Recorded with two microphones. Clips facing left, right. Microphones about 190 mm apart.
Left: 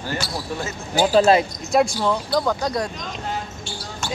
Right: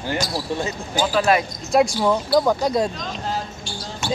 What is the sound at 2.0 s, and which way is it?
Speech, 10° right (ahead or behind).